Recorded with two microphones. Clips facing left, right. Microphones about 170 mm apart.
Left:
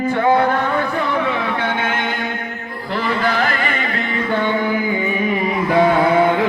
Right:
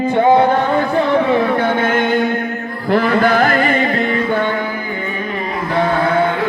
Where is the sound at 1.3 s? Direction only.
40° right (ahead or behind).